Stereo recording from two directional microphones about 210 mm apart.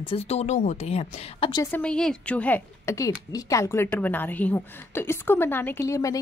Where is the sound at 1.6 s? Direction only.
5° left (ahead or behind).